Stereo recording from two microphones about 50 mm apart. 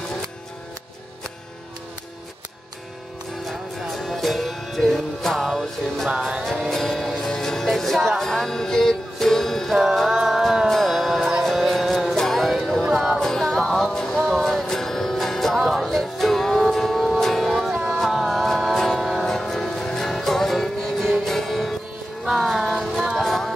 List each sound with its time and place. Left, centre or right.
3.4 s music: centre
9.8 s music: centre
12.8 s music: centre
13.2 s music: centre
22.6 s music: centre
23.2 s music: centre